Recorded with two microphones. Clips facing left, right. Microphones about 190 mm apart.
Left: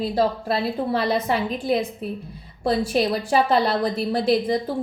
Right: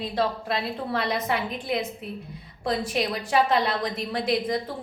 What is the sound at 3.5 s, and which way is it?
A woman's voice, 35° left (ahead or behind).